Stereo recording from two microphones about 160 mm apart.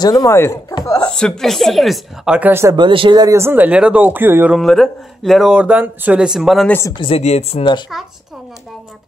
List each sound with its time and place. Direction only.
0.0 s speech: 25° left (ahead or behind)
1.1 s speech: 5° left (ahead or behind); by 2.7 s 10° right (ahead or behind)
2.7 s speech: 30° right (ahead or behind); by 4.6 s 10° right (ahead or behind)
4.6 s speech: centre (ahead or behind)
7.0 s speech: 40° left (ahead or behind)